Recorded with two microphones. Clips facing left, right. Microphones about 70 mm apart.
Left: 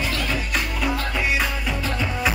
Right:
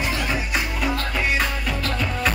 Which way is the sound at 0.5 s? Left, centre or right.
Centre.